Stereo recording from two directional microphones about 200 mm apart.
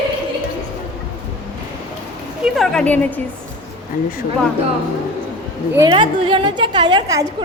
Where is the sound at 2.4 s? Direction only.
Centre (ahead or behind).